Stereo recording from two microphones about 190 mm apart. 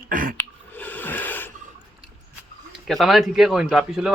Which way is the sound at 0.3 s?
10° left (ahead or behind).